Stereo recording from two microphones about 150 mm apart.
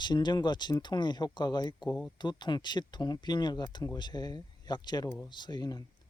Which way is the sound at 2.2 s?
30° left (ahead or behind).